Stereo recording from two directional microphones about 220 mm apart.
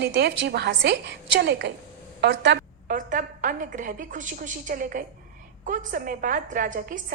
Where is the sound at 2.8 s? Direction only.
35° right (ahead or behind).